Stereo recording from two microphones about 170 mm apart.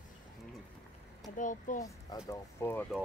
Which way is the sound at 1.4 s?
50° left (ahead or behind).